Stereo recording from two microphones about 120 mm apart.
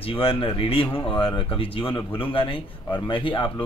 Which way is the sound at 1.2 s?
45° left (ahead or behind).